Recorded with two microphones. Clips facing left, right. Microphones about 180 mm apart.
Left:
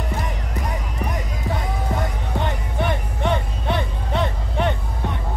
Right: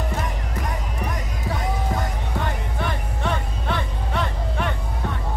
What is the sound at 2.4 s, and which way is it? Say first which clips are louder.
Music: left 5 dB; 20° left (ahead or behind).